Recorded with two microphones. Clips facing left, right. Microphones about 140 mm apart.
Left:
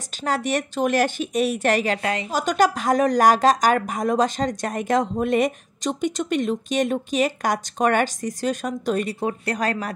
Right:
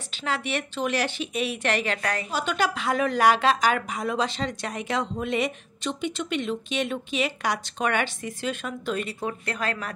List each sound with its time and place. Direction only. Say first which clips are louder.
0.2 s speech: left 5 dB; 45° left (ahead or behind)